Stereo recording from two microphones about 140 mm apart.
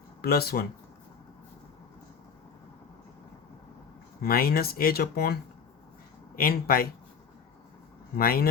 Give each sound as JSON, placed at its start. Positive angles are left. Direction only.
{"t": 0.3, "sound": "speech", "side_deg": 90}
{"t": 4.2, "sound": "speech", "side_deg": 90}
{"t": 6.3, "sound": "speech", "side_deg": 90}
{"t": 8.1, "sound": "speech", "side_deg": 90}